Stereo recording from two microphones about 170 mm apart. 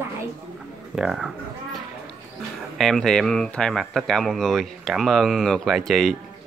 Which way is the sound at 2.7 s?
Centre (ahead or behind).